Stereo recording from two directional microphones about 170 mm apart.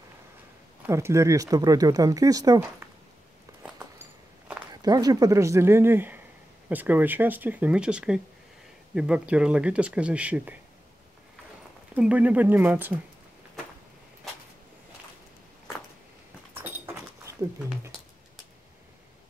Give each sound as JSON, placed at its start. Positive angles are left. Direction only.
{"t": 0.8, "sound": "speech", "side_deg": -15}
{"t": 4.8, "sound": "speech", "side_deg": -20}
{"t": 11.9, "sound": "speech", "side_deg": -10}
{"t": 16.6, "sound": "a sound", "side_deg": -15}